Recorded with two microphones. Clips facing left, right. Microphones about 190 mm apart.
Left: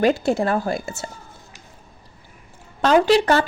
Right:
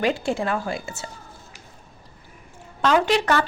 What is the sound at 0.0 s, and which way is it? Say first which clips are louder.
Speech: left 5 dB; 40° left (ahead or behind).